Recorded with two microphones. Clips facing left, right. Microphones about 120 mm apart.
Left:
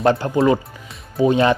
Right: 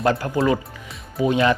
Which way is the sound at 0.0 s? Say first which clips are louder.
Left 4 dB; 25° left (ahead or behind).